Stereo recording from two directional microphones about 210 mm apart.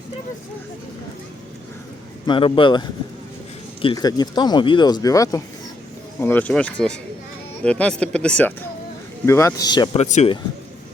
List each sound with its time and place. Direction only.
2.2 s speech: 25° left (ahead or behind)